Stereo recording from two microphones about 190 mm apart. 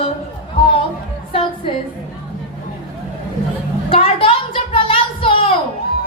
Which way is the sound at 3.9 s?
30° left (ahead or behind).